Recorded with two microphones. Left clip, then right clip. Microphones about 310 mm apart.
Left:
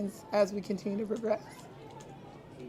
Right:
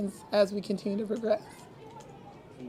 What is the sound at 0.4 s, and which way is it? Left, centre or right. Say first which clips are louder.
Speech: right 2 dB; right.